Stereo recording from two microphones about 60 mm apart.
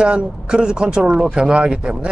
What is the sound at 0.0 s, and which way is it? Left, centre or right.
Speech, centre.